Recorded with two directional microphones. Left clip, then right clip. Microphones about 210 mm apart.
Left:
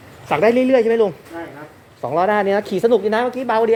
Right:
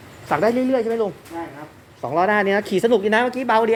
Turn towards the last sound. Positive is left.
turn(degrees=-5)  # may be behind; listen again after turning